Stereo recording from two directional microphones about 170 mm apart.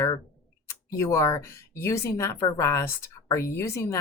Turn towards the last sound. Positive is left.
turn(degrees=15)  # may be behind; listen again after turning